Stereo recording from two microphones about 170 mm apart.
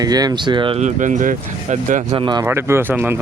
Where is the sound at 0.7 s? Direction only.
45° right (ahead or behind).